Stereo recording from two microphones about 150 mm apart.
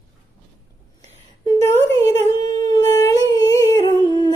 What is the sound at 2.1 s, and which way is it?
Humming, 30° left (ahead or behind).